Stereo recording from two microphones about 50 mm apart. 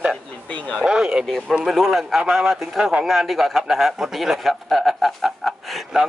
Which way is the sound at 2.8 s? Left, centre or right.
Centre.